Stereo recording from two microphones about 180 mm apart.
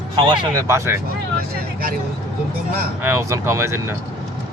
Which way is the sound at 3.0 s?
15° right (ahead or behind).